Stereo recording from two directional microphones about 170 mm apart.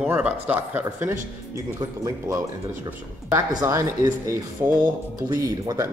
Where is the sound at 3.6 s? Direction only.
20° right (ahead or behind).